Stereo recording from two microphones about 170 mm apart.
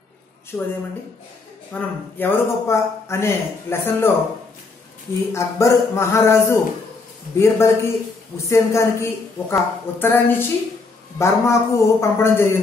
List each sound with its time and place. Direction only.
0.5 s a man's voice: 15° left (ahead or behind)
5.3 s a man's voice: 15° left (ahead or behind)